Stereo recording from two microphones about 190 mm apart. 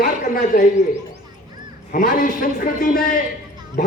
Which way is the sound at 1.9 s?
45° left (ahead or behind).